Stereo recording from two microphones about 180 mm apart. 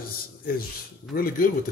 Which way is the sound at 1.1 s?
55° left (ahead or behind).